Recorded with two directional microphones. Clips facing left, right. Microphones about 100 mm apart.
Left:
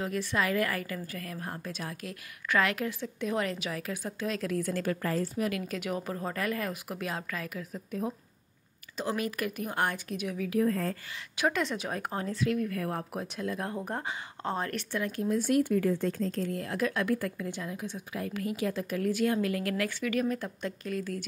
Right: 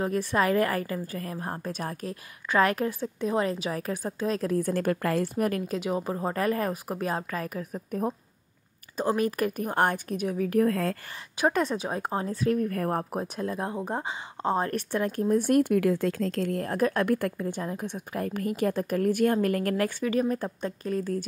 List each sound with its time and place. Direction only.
0.0 s a woman's voice: 40° right (ahead or behind); by 5.5 s 65° right (ahead or behind)
5.5 s a woman's voice: 30° right (ahead or behind)
10.5 s speech: 70° right (ahead or behind)
11.3 s a woman's voice: 40° right (ahead or behind)
12.3 s a woman's voice: 40° right (ahead or behind)
14.9 s speech: 45° right (ahead or behind)
17.4 s a woman's voice: 40° right (ahead or behind)